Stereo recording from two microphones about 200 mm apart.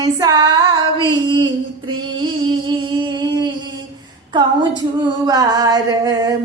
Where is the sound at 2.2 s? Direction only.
25° right (ahead or behind).